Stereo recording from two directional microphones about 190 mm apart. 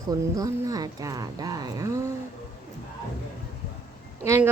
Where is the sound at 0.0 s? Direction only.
20° right (ahead or behind).